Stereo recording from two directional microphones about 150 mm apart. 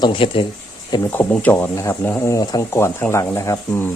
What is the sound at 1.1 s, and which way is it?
Speech, 10° left (ahead or behind).